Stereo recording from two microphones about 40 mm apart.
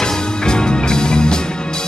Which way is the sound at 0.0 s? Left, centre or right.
Centre.